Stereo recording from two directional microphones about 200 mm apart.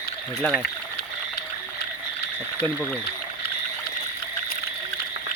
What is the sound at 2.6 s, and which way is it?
Speech, 10° left (ahead or behind).